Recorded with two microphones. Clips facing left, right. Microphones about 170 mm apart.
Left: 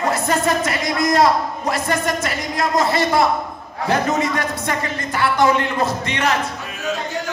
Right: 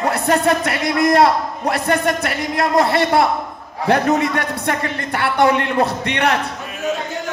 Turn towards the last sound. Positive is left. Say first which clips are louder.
# right 2 dB
turn(degrees=-65)  # may be behind; listen again after turning